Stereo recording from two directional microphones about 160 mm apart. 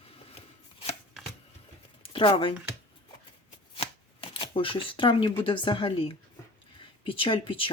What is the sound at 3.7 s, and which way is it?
Shuffling cards, 35° left (ahead or behind).